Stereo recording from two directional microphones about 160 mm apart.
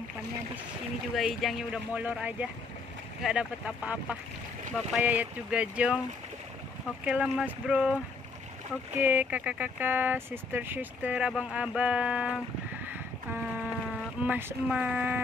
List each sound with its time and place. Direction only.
1.1 s speech: centre (ahead or behind)
7.1 s speech: 5° right (ahead or behind)
12.8 s a sound: 10° right (ahead or behind)
14.2 s speech: 10° right (ahead or behind)